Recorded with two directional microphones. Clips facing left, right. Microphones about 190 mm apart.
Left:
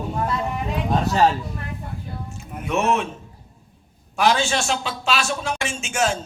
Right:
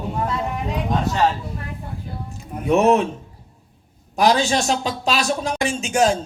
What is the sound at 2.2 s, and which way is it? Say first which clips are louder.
Speech: right 10 dB; 35° right (ahead or behind).